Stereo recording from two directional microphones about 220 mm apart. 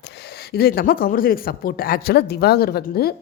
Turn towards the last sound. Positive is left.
turn(degrees=45)  # may be behind; listen again after turning